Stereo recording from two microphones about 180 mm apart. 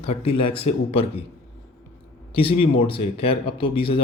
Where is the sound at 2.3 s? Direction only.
30° left (ahead or behind).